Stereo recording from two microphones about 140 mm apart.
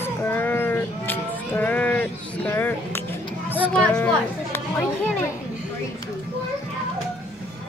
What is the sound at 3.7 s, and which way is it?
Music, 10° left (ahead or behind).